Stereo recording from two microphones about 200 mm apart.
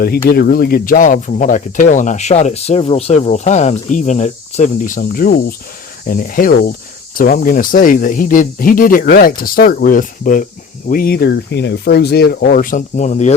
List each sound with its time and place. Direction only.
0.0 s speech: 50° left (ahead or behind)